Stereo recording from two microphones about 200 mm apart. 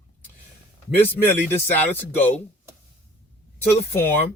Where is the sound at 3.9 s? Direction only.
10° left (ahead or behind).